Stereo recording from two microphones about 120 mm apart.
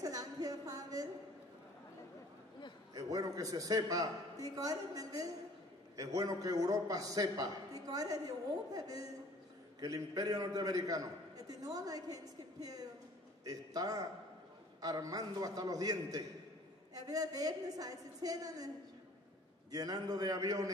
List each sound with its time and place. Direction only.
0.0 s a sound: 30° right (ahead or behind)
2.9 s a man's voice: 30° right (ahead or behind)
19.7 s a man's voice: 30° right (ahead or behind)